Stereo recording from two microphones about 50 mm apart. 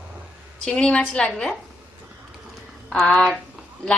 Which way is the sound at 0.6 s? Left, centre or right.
Left.